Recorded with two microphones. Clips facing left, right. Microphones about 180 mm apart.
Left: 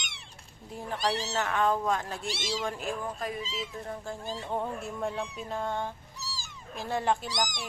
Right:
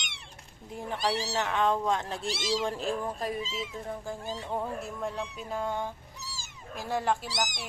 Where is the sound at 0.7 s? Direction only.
15° right (ahead or behind); by 3.3 s 30° right (ahead or behind).